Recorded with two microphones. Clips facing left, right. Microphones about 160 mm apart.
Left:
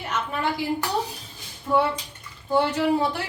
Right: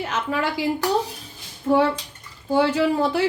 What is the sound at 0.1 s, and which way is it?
Speech, 90° right.